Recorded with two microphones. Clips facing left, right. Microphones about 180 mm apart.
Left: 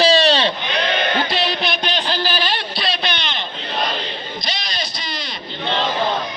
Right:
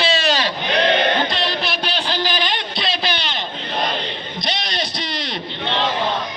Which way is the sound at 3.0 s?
40° right (ahead or behind).